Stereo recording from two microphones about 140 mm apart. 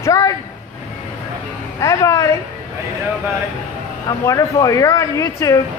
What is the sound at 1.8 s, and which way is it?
Speech, 20° left (ahead or behind).